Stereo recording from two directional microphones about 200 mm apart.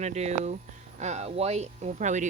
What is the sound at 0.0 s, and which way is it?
Speech, 35° right (ahead or behind).